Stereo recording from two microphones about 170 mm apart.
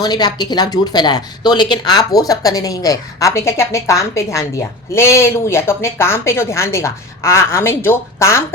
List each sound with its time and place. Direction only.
0.0 s speech: 25° left (ahead or behind)